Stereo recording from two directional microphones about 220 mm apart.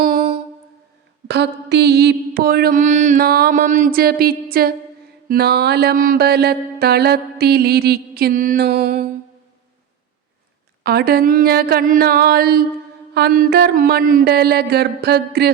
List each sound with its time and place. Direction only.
0.0 s a sound: 35° right (ahead or behind)
1.3 s mantra: 50° right (ahead or behind)
10.8 s mantra: 45° right (ahead or behind)